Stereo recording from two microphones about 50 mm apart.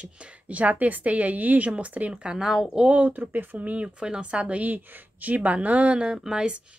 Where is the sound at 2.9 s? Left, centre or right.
Right.